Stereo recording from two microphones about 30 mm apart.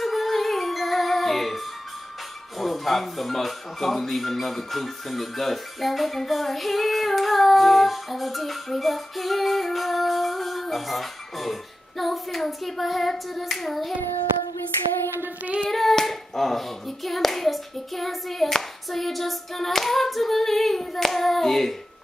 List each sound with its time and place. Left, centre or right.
0.0 s music: centre
2.6 s hands: centre
6.1 s female singing: centre
12.0 s hands: centre
15.7 s hands: centre